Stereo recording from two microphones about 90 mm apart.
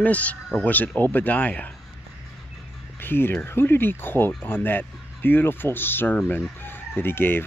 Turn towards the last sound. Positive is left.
turn(degrees=25)  # may be behind; listen again after turning